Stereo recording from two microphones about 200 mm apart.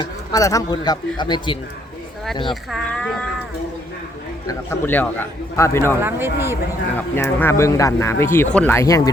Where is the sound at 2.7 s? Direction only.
5° left (ahead or behind).